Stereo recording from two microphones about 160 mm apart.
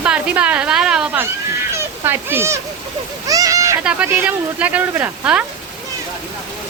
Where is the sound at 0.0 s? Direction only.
5° right (ahead or behind).